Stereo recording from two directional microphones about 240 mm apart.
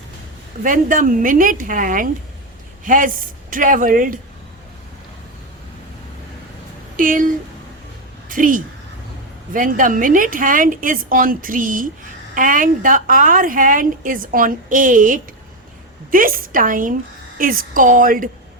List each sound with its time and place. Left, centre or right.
0.6 s a woman's voice: right
6.9 s a woman's voice: right